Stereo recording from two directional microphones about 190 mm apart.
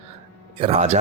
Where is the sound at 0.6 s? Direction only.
30° right (ahead or behind).